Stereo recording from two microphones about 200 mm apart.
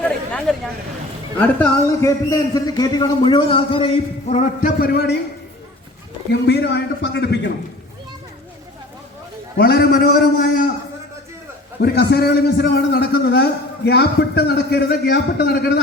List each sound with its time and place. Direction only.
0.0 s a sound: 5° left (ahead or behind)
1.4 s a man's voice: 10° left (ahead or behind); by 5.1 s 50° left (ahead or behind)
6.3 s a man's voice: 55° left (ahead or behind)
9.6 s a man's voice: 50° left (ahead or behind)
11.8 s a man's voice: 55° left (ahead or behind)